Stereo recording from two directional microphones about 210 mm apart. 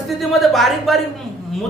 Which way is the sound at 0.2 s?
Centre (ahead or behind).